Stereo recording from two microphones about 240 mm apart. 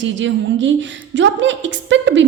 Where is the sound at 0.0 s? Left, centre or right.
Right.